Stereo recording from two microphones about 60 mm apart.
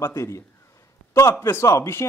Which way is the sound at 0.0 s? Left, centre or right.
Left.